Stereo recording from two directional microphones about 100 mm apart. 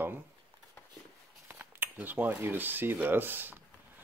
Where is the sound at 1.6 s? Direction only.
20° right (ahead or behind).